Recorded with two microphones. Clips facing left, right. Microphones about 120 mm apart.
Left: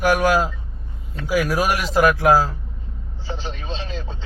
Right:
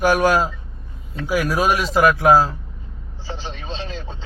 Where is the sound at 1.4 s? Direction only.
15° right (ahead or behind).